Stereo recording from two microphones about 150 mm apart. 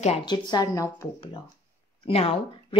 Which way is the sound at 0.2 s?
30° left (ahead or behind).